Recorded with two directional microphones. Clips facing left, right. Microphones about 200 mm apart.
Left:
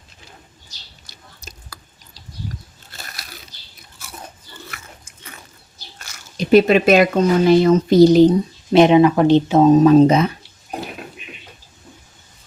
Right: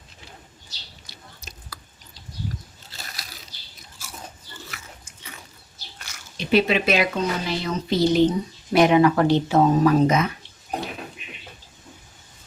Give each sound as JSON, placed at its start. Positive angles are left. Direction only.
{"t": 1.1, "sound": "chewing", "side_deg": 45}
{"t": 1.5, "sound": "drip", "side_deg": 40}
{"t": 6.0, "sound": "speech", "side_deg": 45}
{"t": 8.7, "sound": "speech", "side_deg": 25}